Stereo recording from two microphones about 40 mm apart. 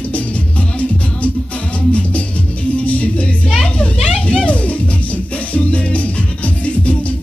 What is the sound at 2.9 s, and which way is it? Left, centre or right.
Music, left.